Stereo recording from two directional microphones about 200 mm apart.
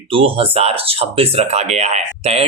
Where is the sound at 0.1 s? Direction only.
30° right (ahead or behind).